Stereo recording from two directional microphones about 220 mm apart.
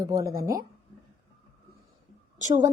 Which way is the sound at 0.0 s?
15° right (ahead or behind).